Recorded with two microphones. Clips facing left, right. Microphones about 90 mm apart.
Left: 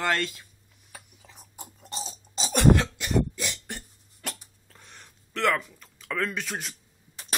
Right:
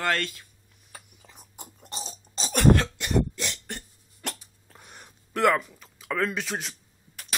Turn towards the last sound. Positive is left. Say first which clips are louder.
# right 2 dB
turn(degrees=0)  # may be behind; listen again after turning